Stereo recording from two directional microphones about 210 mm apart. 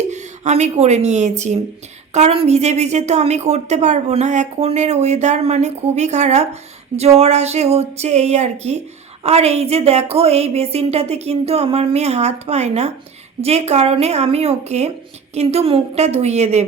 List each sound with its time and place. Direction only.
0.1 s a woman's voice: 35° right (ahead or behind)